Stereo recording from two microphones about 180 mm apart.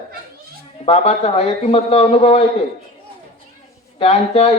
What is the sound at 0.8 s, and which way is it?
Speech, 35° left (ahead or behind).